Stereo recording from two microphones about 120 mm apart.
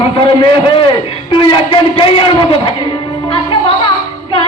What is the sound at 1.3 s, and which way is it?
A man's voice, 45° left (ahead or behind).